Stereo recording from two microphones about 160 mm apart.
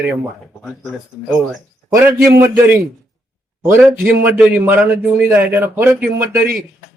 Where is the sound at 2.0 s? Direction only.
15° right (ahead or behind).